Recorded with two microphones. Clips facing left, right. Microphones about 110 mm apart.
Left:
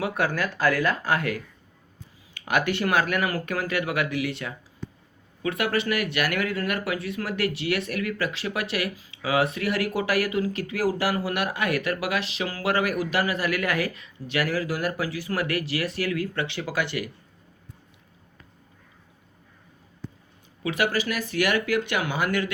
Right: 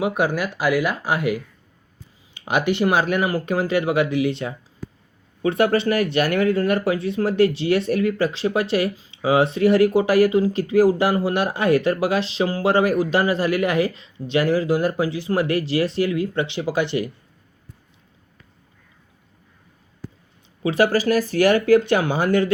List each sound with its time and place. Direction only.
0.0 s speech: 15° right (ahead or behind)
20.6 s speech: 30° right (ahead or behind)